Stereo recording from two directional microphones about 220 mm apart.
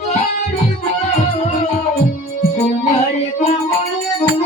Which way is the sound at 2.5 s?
30° left (ahead or behind).